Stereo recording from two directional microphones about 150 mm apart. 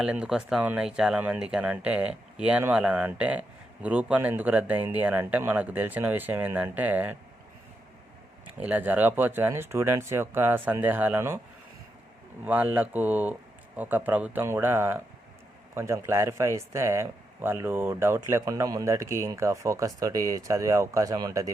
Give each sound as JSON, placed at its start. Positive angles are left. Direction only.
{"t": 0.0, "sound": "speech", "side_deg": -5}
{"t": 8.5, "sound": "speech", "side_deg": -10}
{"t": 12.5, "sound": "speech", "side_deg": -10}